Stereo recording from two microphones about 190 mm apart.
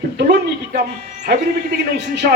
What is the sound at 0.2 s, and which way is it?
Speech, 60° right (ahead or behind).